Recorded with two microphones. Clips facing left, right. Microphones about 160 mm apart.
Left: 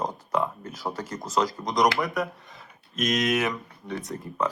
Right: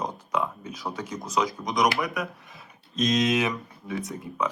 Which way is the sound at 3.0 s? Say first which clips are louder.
Right 1 dB; 20° right (ahead or behind).